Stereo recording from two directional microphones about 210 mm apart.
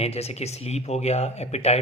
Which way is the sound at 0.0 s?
30° left (ahead or behind).